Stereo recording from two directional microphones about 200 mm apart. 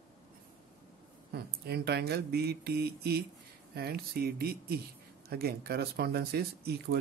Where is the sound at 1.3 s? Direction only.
55° right (ahead or behind).